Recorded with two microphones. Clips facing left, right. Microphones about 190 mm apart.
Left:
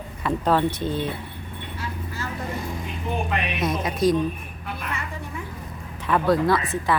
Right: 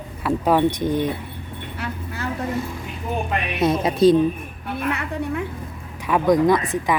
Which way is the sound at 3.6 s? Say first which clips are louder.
Right 7 dB; 30° right (ahead or behind).